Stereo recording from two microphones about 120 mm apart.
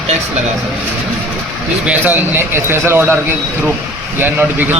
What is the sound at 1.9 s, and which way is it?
A man's voice, 15° right (ahead or behind).